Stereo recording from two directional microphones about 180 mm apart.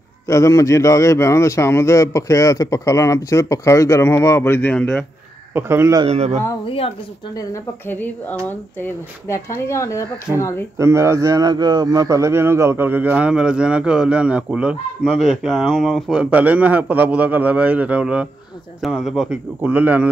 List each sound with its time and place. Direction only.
0.3 s speech: 15° left (ahead or behind)
5.5 s a man's voice: 15° right (ahead or behind)
6.0 s speech: 35° right (ahead or behind)
7.3 s speech: 15° left (ahead or behind)
10.8 s a man's voice: 15° right (ahead or behind)